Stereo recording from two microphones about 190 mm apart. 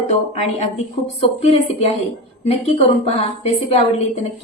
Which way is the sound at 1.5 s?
30° left (ahead or behind).